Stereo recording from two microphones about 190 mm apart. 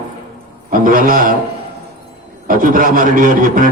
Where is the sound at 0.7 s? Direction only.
45° right (ahead or behind).